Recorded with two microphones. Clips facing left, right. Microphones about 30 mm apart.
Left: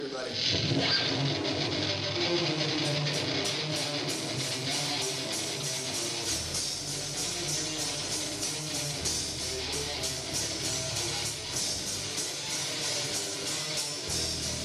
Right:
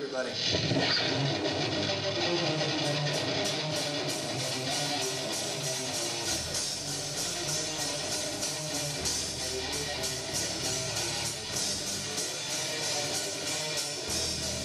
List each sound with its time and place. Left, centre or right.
0.4 s speech: centre
0.7 s music: centre